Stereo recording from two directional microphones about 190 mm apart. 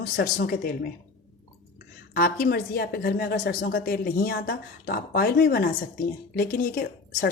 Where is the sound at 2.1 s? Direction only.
50° left (ahead or behind).